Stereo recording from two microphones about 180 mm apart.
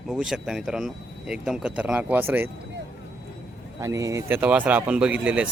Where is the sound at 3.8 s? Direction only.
15° right (ahead or behind).